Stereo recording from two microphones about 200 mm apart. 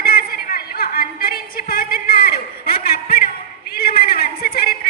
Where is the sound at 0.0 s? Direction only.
50° left (ahead or behind).